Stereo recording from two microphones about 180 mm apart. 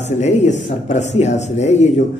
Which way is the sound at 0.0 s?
40° left (ahead or behind).